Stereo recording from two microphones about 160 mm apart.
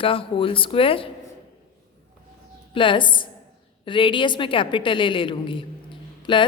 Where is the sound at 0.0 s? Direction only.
35° left (ahead or behind).